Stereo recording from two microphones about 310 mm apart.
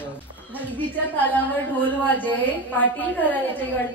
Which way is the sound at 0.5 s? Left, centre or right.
Centre.